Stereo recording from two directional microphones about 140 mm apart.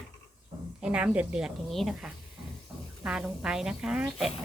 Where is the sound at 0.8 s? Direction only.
5° right (ahead or behind).